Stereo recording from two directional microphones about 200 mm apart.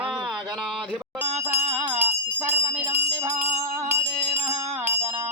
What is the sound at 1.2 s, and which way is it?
Speech, 10° right (ahead or behind).